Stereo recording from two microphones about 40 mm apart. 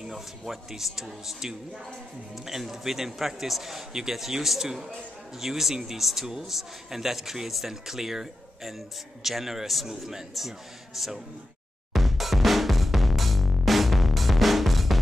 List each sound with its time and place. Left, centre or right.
0.1 s a man's voice: centre
11.9 s music: centre